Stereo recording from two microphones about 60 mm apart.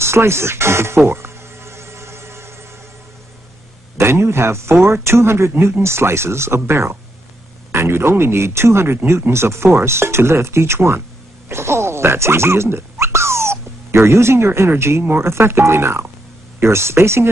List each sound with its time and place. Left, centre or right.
0.0 s insect: right
4.0 s speech: right